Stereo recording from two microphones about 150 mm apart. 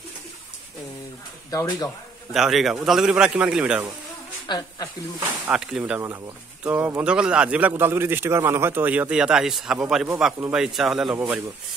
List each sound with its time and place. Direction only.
1.5 s speech: 25° left (ahead or behind)
2.3 s speech: centre (ahead or behind)
4.5 s speech: 25° left (ahead or behind)
5.5 s a man's voice: 5° right (ahead or behind)
5.9 s a man's voice: 15° right (ahead or behind)